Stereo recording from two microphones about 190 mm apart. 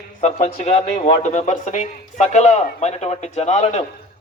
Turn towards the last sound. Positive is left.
turn(degrees=35)  # may be behind; listen again after turning